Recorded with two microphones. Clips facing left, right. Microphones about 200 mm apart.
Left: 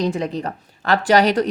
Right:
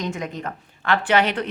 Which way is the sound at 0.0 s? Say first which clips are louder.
Left 6 dB; 35° left (ahead or behind).